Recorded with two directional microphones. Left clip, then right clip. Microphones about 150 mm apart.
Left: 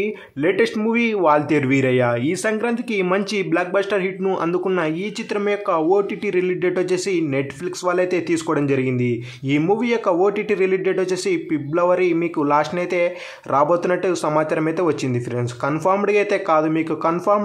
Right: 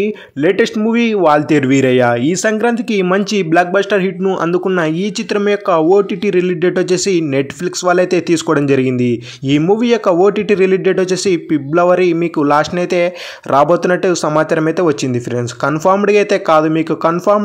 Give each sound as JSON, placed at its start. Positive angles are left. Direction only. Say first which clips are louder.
{"t": 0.0, "sound": "speech", "louder": "right 6 dB", "side_deg": -30}